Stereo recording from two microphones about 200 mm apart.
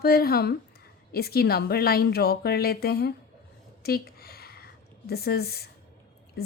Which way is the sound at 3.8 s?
50° left (ahead or behind).